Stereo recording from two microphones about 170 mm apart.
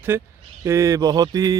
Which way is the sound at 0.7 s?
15° right (ahead or behind).